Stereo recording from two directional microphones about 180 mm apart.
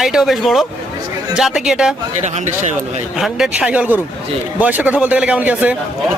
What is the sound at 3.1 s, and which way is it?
A man's voice, centre (ahead or behind).